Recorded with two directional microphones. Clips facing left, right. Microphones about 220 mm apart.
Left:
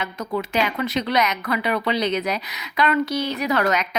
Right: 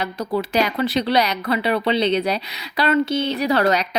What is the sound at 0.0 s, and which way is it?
Speech, 35° right (ahead or behind).